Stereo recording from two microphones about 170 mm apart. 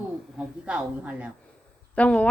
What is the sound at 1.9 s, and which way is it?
Speech, 10° left (ahead or behind).